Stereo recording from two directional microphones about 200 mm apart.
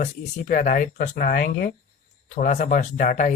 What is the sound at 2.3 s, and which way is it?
Speech, 40° left (ahead or behind).